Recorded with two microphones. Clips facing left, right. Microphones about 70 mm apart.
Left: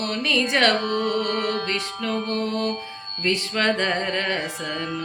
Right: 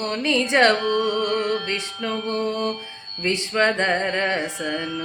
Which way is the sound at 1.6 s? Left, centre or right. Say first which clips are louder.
Even; right.